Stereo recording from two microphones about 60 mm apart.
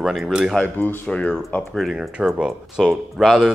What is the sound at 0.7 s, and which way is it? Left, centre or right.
Speech, left.